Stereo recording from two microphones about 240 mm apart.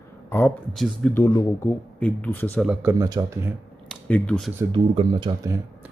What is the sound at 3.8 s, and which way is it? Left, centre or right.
Speech, centre.